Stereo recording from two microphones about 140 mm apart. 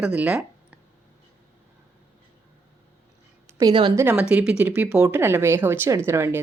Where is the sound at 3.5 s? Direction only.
25° right (ahead or behind).